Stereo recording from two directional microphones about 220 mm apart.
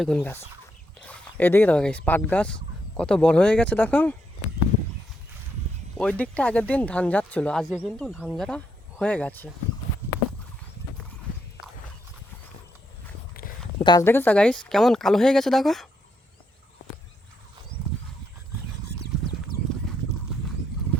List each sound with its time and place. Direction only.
0.0 s a woman's voice: 5° left (ahead or behind)
6.0 s speech: 5° left (ahead or behind)
13.8 s a woman's voice: 15° left (ahead or behind)
19.5 s clip-clop: 45° left (ahead or behind)